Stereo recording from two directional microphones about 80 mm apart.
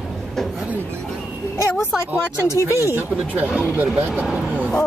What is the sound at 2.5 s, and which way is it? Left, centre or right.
Speech, left.